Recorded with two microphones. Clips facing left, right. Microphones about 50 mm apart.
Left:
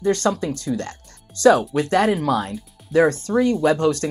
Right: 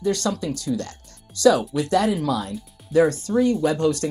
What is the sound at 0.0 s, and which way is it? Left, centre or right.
Speech, left.